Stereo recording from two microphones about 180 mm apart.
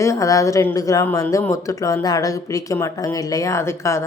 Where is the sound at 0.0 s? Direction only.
15° left (ahead or behind).